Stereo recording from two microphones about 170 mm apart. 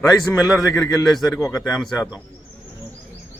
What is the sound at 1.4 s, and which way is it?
Speech, 20° left (ahead or behind).